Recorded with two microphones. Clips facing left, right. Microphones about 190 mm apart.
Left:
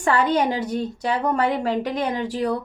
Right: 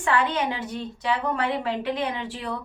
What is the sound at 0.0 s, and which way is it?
A woman's voice, 40° left (ahead or behind).